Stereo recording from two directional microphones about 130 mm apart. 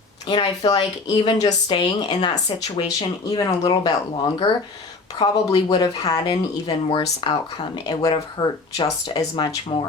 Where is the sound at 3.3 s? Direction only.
30° left (ahead or behind).